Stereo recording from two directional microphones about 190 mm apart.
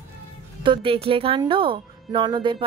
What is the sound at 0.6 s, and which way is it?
Speech, 25° right (ahead or behind).